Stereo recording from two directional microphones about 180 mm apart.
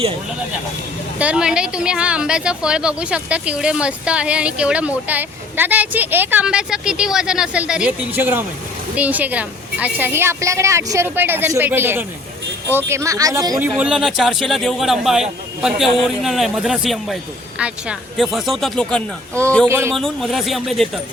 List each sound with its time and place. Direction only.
1.2 s a woman's voice: 5° right (ahead or behind)
13.6 s a woman's voice: 5° right (ahead or behind)
19.6 s a woman's voice: 15° right (ahead or behind)
19.9 s a woman's voice: centre (ahead or behind)